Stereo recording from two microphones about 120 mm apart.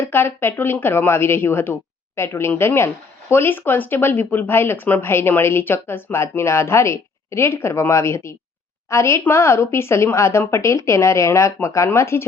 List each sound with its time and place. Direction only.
0.0 s speech: 15° left (ahead or behind)